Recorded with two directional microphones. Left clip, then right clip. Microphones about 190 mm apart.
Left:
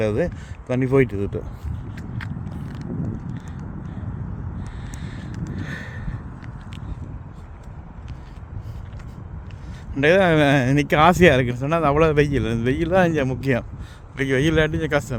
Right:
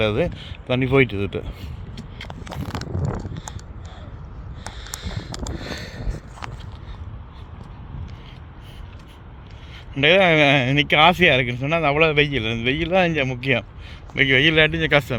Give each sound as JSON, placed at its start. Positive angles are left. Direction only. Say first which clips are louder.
{"t": 0.0, "sound": "speech", "louder": "right 1 dB", "side_deg": 5}
{"t": 4.8, "sound": "a sound", "louder": "right 4 dB", "side_deg": -30}
{"t": 10.0, "sound": "speech", "louder": "right 1 dB", "side_deg": 20}
{"t": 14.2, "sound": "speech", "louder": "right 4 dB", "side_deg": 20}